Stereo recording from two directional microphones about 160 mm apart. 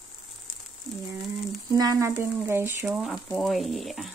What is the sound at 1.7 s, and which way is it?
Speech, 20° right (ahead or behind).